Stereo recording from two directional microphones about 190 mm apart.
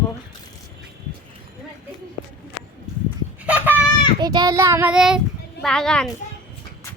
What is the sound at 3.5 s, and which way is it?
Speech, 10° right (ahead or behind).